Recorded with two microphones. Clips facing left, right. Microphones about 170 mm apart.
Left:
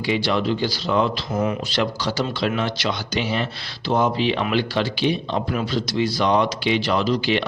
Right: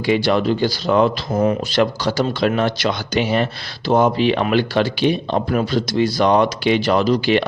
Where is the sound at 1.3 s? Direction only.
35° right (ahead or behind).